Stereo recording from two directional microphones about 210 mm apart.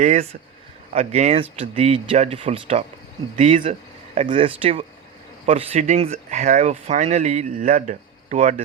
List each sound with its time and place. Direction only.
0.0 s speech: 35° right (ahead or behind)